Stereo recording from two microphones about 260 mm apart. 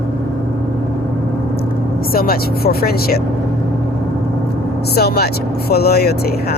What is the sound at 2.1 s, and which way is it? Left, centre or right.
Speech, left.